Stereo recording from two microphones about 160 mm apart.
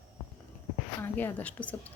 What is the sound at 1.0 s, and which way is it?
Speech, 10° left (ahead or behind).